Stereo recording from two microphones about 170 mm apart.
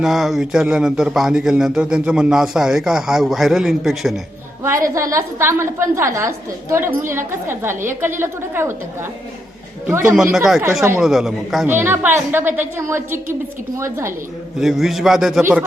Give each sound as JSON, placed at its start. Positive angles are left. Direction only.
{"t": 0.0, "sound": "a man's voice", "side_deg": 0}
{"t": 4.6, "sound": "a woman's voice", "side_deg": -15}
{"t": 10.3, "sound": "a man's voice", "side_deg": 0}
{"t": 11.7, "sound": "a woman's voice", "side_deg": -10}
{"t": 14.6, "sound": "a man's voice", "side_deg": 0}